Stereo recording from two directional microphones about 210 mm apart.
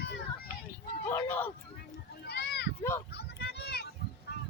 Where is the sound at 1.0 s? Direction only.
10° left (ahead or behind).